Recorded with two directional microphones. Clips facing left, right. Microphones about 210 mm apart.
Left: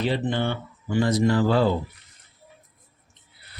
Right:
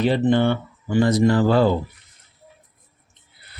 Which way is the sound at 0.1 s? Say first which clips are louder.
Right 7 dB; 50° right (ahead or behind).